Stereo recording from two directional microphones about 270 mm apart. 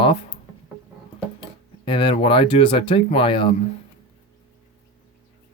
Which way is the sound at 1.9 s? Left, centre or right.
Centre.